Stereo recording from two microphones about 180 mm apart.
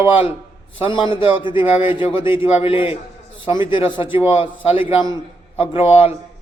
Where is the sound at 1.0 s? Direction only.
25° left (ahead or behind).